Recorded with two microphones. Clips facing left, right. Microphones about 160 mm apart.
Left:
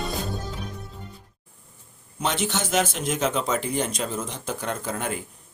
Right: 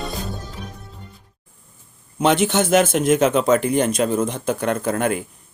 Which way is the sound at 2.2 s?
60° right (ahead or behind).